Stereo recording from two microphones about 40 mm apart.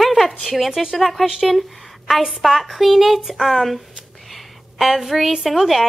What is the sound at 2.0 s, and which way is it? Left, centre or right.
A woman's voice, centre.